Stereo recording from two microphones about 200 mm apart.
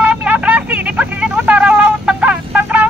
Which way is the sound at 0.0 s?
5° right (ahead or behind).